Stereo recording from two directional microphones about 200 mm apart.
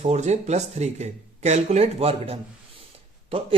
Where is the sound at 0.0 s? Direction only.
35° right (ahead or behind).